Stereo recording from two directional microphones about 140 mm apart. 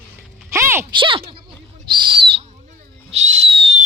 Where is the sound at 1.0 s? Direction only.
40° right (ahead or behind).